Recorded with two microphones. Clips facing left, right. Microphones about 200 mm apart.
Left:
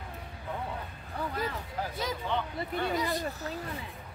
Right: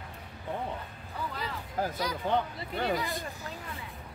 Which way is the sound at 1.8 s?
45° right (ahead or behind).